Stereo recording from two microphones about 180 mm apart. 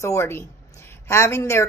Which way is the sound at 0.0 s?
15° left (ahead or behind).